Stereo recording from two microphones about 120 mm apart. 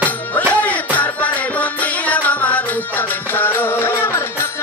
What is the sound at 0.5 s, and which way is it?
Music, 15° left (ahead or behind).